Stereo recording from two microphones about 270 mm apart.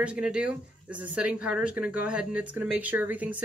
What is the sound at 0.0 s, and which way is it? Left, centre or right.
Speech, centre.